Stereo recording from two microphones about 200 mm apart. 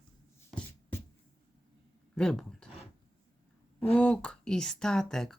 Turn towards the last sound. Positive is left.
turn(degrees=0)  # may be behind; listen again after turning